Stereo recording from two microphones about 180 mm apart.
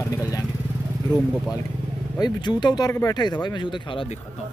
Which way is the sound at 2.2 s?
25° left (ahead or behind).